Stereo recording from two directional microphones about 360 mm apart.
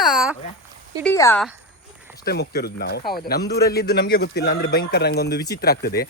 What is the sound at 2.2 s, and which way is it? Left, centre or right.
A man's voice, left.